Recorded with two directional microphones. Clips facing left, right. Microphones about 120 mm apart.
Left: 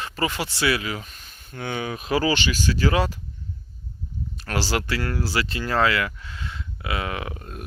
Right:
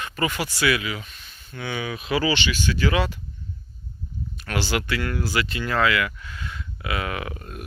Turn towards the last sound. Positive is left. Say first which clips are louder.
# even
turn(degrees=25)  # may be behind; listen again after turning